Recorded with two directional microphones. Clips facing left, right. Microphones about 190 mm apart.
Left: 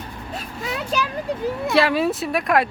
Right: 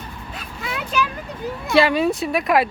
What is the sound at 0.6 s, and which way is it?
Vehicle, 35° left (ahead or behind).